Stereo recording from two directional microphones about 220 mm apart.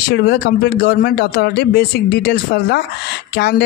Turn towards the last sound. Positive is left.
turn(degrees=45)  # may be behind; listen again after turning